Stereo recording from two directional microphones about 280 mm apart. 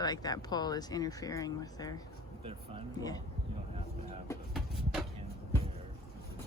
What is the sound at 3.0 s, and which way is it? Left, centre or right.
Speech, centre.